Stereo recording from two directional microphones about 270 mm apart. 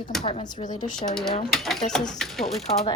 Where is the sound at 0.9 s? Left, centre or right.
Centre.